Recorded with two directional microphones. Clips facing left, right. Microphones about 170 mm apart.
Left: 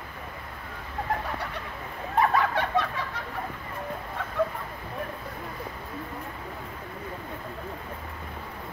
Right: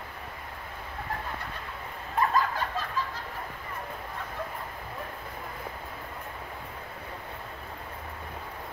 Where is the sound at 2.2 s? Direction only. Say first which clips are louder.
Left 3 dB; 70° left (ahead or behind).